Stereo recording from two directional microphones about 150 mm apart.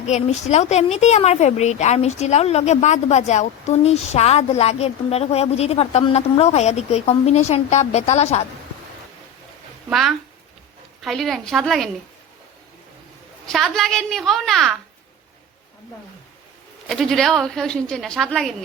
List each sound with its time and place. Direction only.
0.0 s a woman's voice: 50° left (ahead or behind)
9.9 s a woman's voice: centre (ahead or behind)
13.5 s a woman's voice: centre (ahead or behind)
16.8 s a woman's voice: centre (ahead or behind)